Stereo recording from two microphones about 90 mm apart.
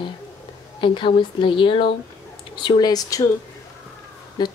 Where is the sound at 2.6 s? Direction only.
55° left (ahead or behind).